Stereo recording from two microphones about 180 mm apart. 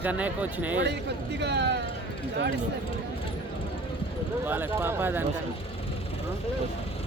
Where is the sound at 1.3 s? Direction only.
75° right (ahead or behind).